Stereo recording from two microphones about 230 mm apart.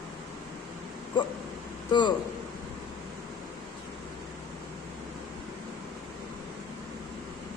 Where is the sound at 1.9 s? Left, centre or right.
Centre.